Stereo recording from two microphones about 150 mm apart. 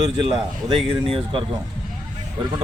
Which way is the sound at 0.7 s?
35° right (ahead or behind).